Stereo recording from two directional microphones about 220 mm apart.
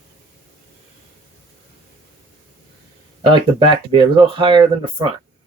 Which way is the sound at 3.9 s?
20° right (ahead or behind).